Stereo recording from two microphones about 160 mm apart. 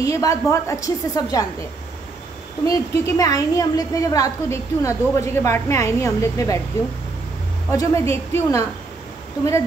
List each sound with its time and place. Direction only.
0.0 s a woman's voice: 20° left (ahead or behind)
7.7 s a woman's voice: 20° left (ahead or behind)